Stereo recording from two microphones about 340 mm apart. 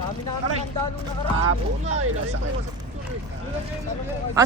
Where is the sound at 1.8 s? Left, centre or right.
Centre.